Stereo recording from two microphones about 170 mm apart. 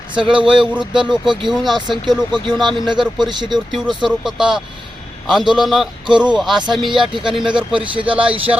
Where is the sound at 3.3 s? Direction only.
25° right (ahead or behind).